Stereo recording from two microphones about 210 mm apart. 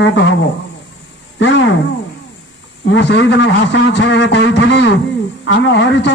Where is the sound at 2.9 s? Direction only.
55° left (ahead or behind).